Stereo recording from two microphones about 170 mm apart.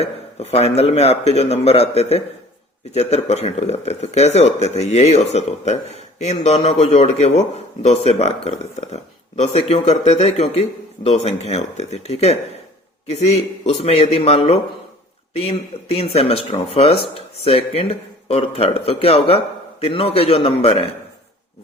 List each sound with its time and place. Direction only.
0.0 s speech: 40° left (ahead or behind)